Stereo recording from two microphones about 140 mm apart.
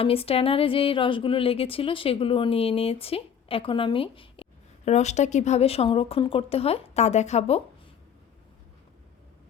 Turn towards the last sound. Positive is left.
turn(degrees=50)  # may be behind; listen again after turning